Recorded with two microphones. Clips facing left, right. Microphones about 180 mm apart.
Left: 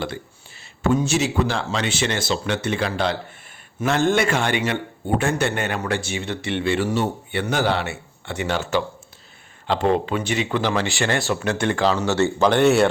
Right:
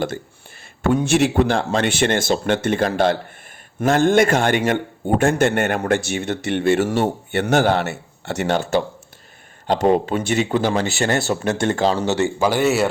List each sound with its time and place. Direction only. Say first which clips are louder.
0.8 s a man's voice: right 3 dB; 60° right (ahead or behind)
10.1 s speech: right 3 dB; 45° right (ahead or behind)
12.0 s speech: even; 15° right (ahead or behind)